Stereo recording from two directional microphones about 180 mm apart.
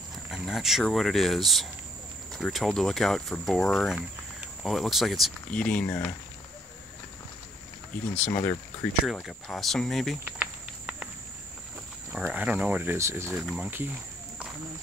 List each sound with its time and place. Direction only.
0.3 s speech: centre (ahead or behind)
8.2 s speech: 45° left (ahead or behind)
9.0 s speech: centre (ahead or behind)
10.2 s a sound: 10° right (ahead or behind)
12.1 s speech: 10° right (ahead or behind)